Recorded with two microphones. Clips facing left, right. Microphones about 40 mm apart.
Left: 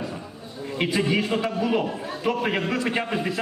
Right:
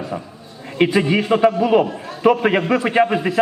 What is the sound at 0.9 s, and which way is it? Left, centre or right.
Speech, centre.